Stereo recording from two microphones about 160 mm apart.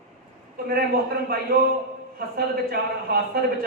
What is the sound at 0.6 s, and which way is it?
Speech, 75° right (ahead or behind).